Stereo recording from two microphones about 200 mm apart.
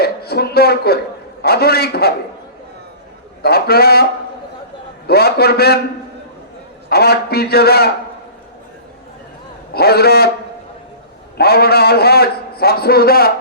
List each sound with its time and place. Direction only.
0.0 s a man's voice: 50° left (ahead or behind)
3.4 s a man's voice: 50° left (ahead or behind)
5.0 s a man's voice: 50° left (ahead or behind)
6.9 s a man's voice: 50° left (ahead or behind)
9.7 s a man's voice: 50° left (ahead or behind)
11.3 s a man's voice: 50° left (ahead or behind)